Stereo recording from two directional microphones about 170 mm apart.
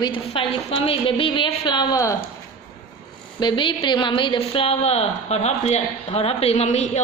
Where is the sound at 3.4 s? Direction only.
30° left (ahead or behind).